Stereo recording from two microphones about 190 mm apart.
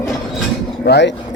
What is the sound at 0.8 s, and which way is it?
Speech, 65° left (ahead or behind).